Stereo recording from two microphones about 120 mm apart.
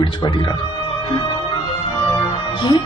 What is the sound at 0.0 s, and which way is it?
Speech, 40° left (ahead or behind).